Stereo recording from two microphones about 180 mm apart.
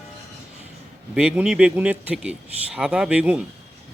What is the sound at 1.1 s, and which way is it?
Speech, 5° right (ahead or behind).